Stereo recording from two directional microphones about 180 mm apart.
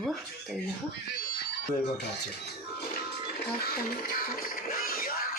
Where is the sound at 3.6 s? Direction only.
55° left (ahead or behind).